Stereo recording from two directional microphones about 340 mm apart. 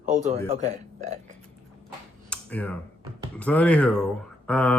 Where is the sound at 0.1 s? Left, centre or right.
Right.